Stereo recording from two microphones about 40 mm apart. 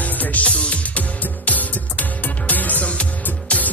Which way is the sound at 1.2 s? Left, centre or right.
Left.